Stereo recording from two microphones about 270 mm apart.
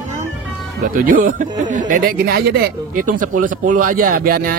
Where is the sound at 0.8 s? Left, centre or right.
Right.